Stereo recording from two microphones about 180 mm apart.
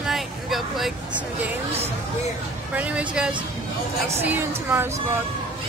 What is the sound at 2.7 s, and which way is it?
Speech, 5° right (ahead or behind).